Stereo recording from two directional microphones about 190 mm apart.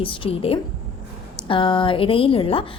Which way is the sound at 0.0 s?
25° left (ahead or behind).